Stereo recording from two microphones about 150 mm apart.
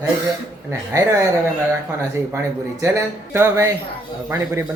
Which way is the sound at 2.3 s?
20° right (ahead or behind).